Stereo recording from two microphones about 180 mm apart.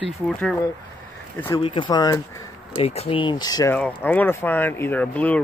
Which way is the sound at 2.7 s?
35° left (ahead or behind).